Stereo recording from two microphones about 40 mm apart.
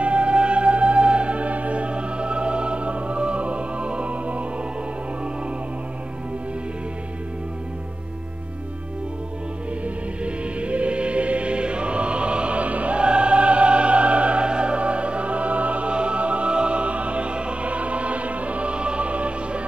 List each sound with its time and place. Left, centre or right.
0.0 s music: right
9.8 s music: right